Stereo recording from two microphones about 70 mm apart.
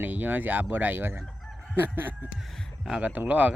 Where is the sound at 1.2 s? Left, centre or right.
Centre.